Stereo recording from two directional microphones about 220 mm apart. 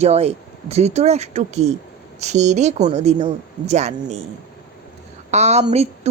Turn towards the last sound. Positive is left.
turn(degrees=-30)  # may be behind; listen again after turning